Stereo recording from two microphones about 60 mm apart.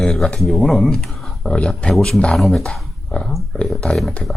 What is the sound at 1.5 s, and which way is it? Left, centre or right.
Speech, centre.